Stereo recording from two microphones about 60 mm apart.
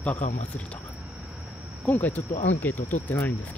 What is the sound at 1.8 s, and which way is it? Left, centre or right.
Speech, left.